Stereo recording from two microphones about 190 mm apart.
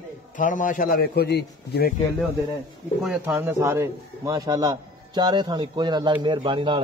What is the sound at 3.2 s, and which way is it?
A man's voice, 10° right (ahead or behind).